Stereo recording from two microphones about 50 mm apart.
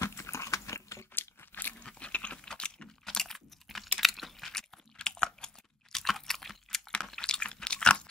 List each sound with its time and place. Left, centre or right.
0.0 s chewing: left
1.1 s crunch: left
1.8 s a sound: left
2.4 s typing: centre
4.0 s crunch: centre
7.0 s chewing: centre